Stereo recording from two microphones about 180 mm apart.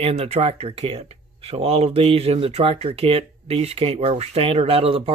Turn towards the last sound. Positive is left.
turn(degrees=-30)  # may be behind; listen again after turning